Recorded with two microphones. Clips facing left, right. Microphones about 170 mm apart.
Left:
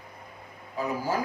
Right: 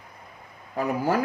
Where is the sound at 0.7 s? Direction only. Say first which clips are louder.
Right 5 dB; 65° right (ahead or behind).